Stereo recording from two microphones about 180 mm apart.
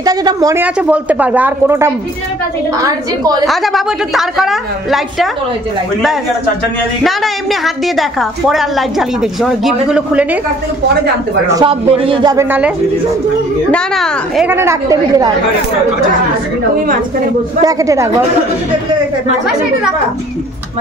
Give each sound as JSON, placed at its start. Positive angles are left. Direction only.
{"t": 0.0, "sound": "speech", "side_deg": -20}
{"t": 0.7, "sound": "speech", "side_deg": -5}
{"t": 3.4, "sound": "a woman's voice", "side_deg": 0}
{"t": 7.6, "sound": "a woman's voice", "side_deg": 0}
{"t": 11.6, "sound": "speech", "side_deg": -30}
{"t": 13.7, "sound": "a woman's voice", "side_deg": 5}
{"t": 14.5, "sound": "speech", "side_deg": -15}
{"t": 17.6, "sound": "speech", "side_deg": -20}